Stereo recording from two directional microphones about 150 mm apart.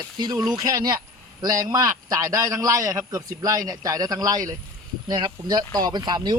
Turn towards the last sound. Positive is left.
turn(degrees=-30)  # may be behind; listen again after turning